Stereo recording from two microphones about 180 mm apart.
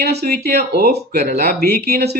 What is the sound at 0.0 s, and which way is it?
Speech, 65° right (ahead or behind).